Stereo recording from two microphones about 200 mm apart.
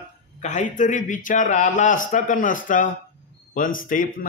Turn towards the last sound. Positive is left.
turn(degrees=45)  # may be behind; listen again after turning